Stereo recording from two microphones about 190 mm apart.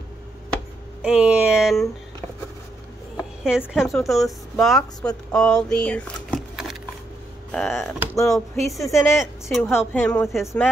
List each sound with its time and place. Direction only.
1.0 s speech: 5° right (ahead or behind)
3.2 s a woman's voice: 5° right (ahead or behind)
8.7 s speech: 15° left (ahead or behind)
9.1 s a woman's voice: centre (ahead or behind)
9.7 s speech: 10° left (ahead or behind)